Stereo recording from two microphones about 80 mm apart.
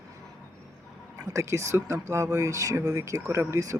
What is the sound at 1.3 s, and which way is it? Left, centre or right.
Speech, right.